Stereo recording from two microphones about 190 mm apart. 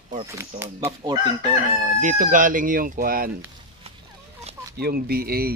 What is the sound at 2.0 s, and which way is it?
Speech, 45° right (ahead or behind).